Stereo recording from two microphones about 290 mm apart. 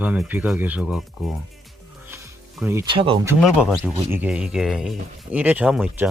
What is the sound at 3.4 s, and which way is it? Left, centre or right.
Speech, centre.